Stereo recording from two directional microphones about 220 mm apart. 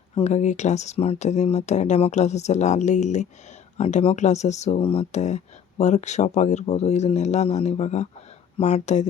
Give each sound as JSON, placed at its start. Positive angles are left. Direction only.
{"t": 0.2, "sound": "speech", "side_deg": 30}